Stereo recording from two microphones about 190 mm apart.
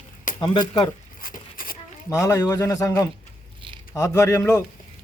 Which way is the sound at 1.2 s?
50° left (ahead or behind).